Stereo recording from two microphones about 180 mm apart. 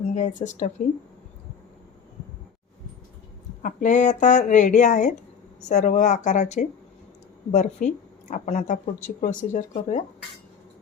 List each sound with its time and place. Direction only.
0.1 s speech: 40° left (ahead or behind)
3.6 s speech: 45° left (ahead or behind)